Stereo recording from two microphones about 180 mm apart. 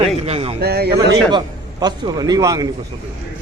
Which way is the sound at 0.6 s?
65° right (ahead or behind).